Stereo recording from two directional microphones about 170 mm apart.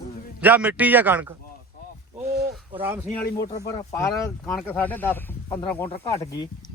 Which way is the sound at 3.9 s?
20° left (ahead or behind).